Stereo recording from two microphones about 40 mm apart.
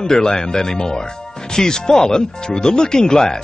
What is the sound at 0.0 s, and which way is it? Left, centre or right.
Speech, centre.